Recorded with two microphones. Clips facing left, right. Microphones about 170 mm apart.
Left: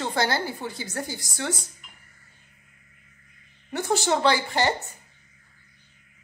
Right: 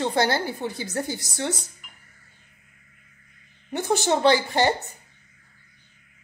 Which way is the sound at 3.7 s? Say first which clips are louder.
Right 1 dB; 20° right (ahead or behind).